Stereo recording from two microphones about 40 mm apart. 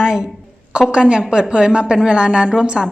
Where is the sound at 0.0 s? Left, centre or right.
Centre.